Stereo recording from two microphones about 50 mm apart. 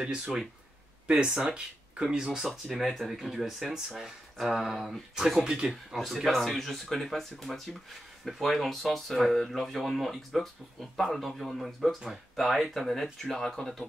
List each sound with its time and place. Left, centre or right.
0.0 s speech: centre
2.0 s speech: centre
5.7 s speech: centre